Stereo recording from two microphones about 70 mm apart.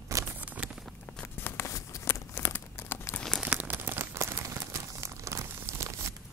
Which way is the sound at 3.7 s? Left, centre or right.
Right.